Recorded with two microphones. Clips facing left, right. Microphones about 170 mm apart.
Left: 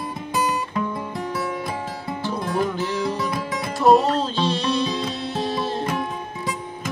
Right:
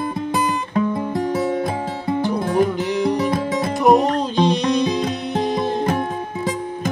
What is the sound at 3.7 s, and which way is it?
Music, 15° right (ahead or behind).